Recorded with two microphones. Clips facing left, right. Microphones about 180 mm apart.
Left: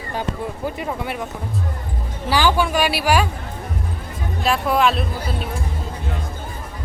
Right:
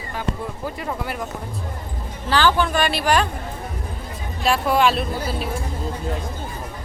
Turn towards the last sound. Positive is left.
turn(degrees=0)  # may be behind; listen again after turning